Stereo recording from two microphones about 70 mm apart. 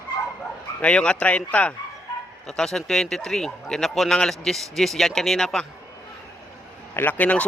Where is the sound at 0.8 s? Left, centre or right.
Centre.